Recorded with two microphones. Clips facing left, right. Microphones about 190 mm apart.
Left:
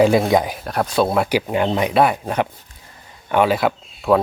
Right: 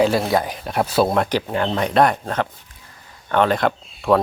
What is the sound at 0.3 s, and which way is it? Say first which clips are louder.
Speech: left 3 dB; 15° left (ahead or behind).